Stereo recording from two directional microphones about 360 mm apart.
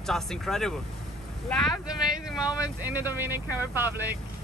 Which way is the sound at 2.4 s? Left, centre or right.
Centre.